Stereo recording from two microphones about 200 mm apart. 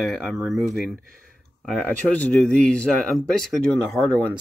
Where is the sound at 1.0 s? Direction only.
45° right (ahead or behind).